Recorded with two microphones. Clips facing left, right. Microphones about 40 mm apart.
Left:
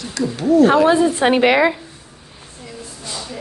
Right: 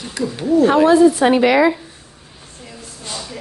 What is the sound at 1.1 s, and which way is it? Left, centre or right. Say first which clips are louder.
Speech: right 1 dB; left.